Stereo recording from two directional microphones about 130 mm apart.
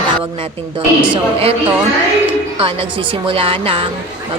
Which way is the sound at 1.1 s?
50° right (ahead or behind).